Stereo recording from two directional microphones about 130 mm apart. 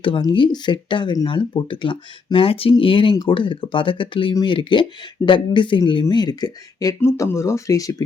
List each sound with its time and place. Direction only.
0.0 s speech: 40° left (ahead or behind)